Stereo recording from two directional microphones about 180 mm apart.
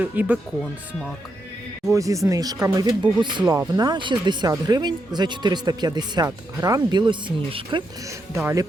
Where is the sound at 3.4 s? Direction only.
10° right (ahead or behind).